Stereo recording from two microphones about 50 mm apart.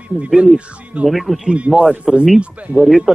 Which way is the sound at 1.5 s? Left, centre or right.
Right.